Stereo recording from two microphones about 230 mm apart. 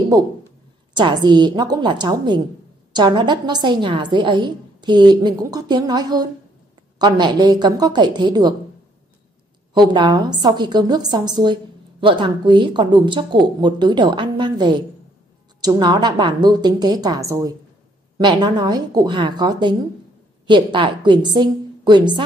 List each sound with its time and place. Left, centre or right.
0.9 s a woman's voice: centre
9.8 s a woman's voice: centre